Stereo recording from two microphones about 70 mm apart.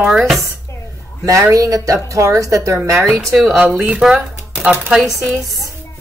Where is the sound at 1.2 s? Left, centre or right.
Right.